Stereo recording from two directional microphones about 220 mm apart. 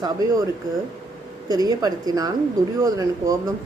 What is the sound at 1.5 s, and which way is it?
A woman's voice, 15° right (ahead or behind).